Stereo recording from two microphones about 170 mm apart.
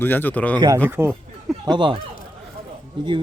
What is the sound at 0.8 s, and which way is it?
Speech, 15° right (ahead or behind).